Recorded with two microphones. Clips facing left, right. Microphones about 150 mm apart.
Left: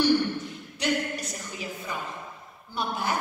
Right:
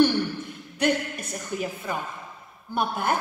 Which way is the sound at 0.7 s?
55° right (ahead or behind).